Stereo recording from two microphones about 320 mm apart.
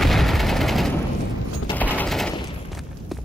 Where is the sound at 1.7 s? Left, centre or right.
Centre.